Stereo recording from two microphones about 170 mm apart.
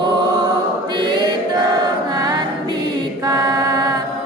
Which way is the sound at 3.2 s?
20° right (ahead or behind).